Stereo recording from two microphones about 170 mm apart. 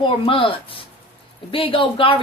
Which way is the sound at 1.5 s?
30° left (ahead or behind).